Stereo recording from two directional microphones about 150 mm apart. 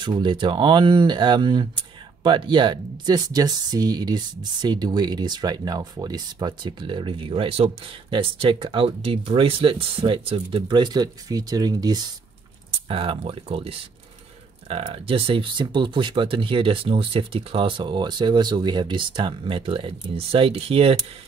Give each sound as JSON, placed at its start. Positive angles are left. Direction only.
{"t": 0.0, "sound": "speech", "side_deg": -35}
{"t": 12.8, "sound": "speech", "side_deg": -35}